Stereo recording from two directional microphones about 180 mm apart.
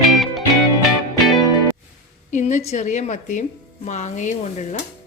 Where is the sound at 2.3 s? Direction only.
40° left (ahead or behind).